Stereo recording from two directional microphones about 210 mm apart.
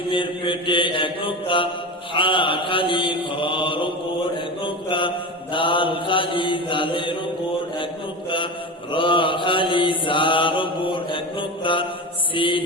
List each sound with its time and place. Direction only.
0.1 s mantra: 25° left (ahead or behind)
8.9 s mantra: 25° left (ahead or behind)